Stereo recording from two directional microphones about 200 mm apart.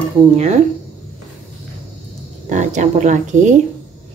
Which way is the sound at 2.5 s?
35° right (ahead or behind).